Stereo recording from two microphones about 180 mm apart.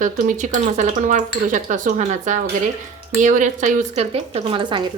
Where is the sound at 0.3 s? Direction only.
45° right (ahead or behind).